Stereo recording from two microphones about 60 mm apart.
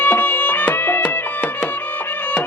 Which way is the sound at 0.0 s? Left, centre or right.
Left.